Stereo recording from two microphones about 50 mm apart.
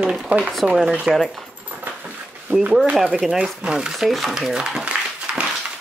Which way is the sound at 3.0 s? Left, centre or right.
Centre.